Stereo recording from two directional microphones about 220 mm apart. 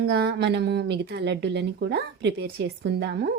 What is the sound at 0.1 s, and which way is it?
Speech, 50° right (ahead or behind).